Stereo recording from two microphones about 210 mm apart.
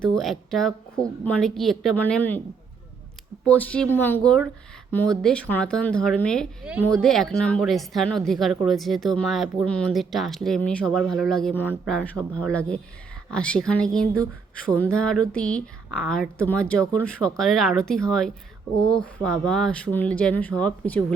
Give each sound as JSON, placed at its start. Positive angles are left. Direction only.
{"t": 0.2, "sound": "speech", "side_deg": 0}
{"t": 3.4, "sound": "speech", "side_deg": 5}